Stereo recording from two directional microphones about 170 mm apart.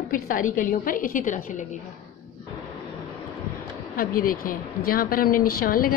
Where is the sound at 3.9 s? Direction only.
55° left (ahead or behind).